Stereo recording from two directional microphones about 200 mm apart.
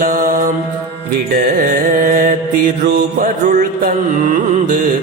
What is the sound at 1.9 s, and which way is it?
Music, 40° right (ahead or behind).